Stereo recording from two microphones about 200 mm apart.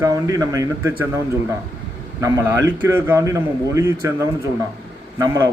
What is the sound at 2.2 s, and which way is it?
A man's voice, 15° right (ahead or behind).